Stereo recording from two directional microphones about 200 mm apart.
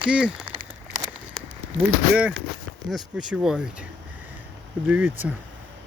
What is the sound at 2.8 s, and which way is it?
Speech, centre (ahead or behind).